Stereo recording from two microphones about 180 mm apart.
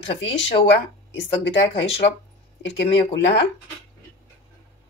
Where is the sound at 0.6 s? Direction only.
90° left.